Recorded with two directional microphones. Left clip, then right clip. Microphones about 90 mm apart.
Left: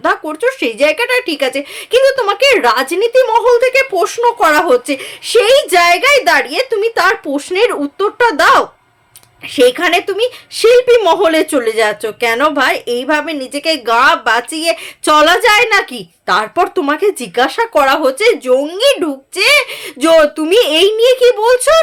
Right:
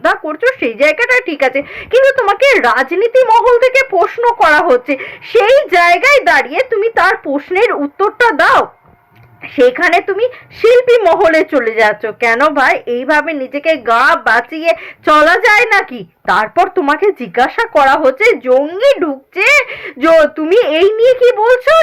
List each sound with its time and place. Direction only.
0.3 s a woman's voice: 45° left (ahead or behind)
9.7 s a woman's voice: 50° left (ahead or behind)
20.1 s a woman's voice: 20° left (ahead or behind)
20.3 s a woman's voice: 45° left (ahead or behind)